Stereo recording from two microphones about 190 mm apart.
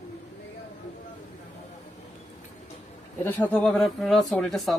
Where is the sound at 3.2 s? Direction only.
10° left (ahead or behind).